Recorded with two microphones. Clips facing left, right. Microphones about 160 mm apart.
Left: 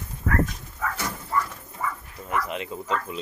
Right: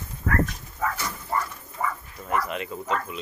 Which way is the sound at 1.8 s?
50° right (ahead or behind).